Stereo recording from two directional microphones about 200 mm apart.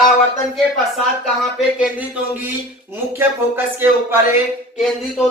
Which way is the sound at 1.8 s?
5° right (ahead or behind).